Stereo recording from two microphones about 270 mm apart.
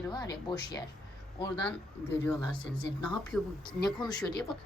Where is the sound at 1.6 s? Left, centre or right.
Centre.